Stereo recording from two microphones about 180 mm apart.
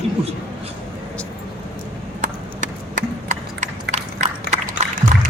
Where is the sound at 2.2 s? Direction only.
45° right (ahead or behind).